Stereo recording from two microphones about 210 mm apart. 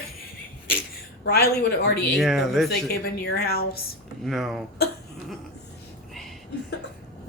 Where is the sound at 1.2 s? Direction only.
50° left (ahead or behind).